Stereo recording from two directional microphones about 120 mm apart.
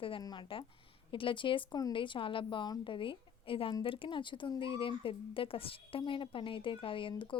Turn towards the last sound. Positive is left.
turn(degrees=45)  # may be behind; listen again after turning